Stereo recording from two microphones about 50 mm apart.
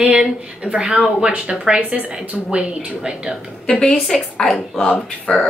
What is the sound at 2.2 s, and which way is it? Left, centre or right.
A woman's voice, right.